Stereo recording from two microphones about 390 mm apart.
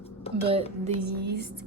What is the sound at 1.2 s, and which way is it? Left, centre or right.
Speech, right.